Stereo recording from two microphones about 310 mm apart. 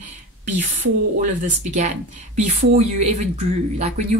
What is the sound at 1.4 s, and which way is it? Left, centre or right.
A woman's voice, right.